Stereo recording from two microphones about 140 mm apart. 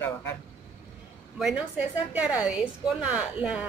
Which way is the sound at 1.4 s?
5° right (ahead or behind).